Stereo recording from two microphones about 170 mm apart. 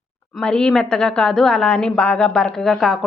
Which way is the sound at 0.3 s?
5° left (ahead or behind).